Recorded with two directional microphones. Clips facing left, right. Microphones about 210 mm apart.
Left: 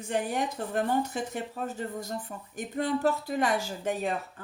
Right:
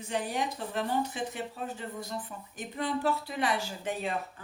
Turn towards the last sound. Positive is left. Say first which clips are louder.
# left 4 dB
turn(degrees=45)  # may be behind; listen again after turning